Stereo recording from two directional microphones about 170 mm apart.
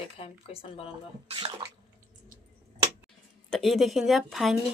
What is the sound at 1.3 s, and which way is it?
Speech, 30° right (ahead or behind).